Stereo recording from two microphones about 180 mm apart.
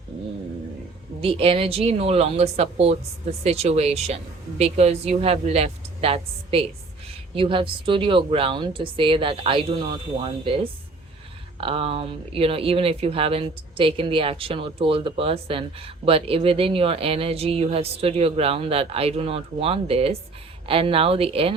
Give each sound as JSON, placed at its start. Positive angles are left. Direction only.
{"t": 1.2, "sound": "speech", "side_deg": -30}